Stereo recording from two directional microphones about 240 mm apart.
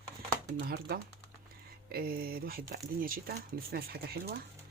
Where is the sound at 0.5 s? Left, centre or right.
Right.